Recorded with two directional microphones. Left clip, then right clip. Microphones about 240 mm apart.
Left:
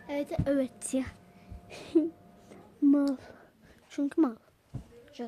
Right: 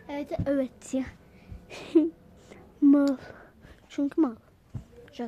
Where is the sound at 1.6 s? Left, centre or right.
Centre.